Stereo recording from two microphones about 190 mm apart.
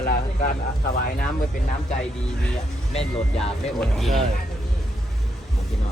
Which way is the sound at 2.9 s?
30° left (ahead or behind).